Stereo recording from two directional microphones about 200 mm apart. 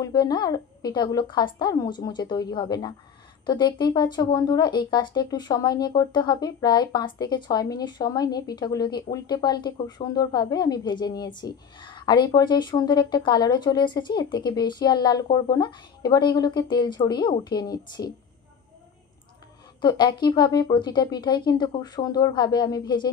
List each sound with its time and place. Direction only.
0.0 s speech: 20° left (ahead or behind)
19.8 s speech: 20° left (ahead or behind)